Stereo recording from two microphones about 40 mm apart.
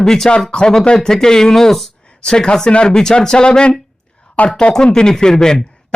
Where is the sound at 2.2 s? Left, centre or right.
Centre.